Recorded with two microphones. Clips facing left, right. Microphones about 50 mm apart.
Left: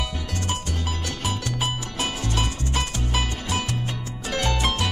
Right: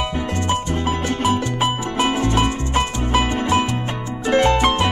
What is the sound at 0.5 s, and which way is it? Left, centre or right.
Music, right.